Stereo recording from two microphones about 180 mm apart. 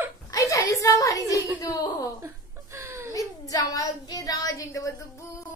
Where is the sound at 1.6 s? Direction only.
20° left (ahead or behind).